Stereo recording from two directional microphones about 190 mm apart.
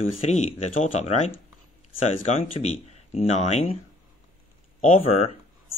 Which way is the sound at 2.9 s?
35° left (ahead or behind).